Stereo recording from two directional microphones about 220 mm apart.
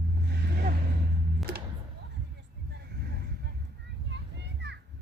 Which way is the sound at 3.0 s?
45° right (ahead or behind).